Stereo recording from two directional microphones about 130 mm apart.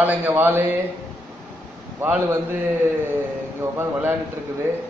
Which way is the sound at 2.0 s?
15° right (ahead or behind).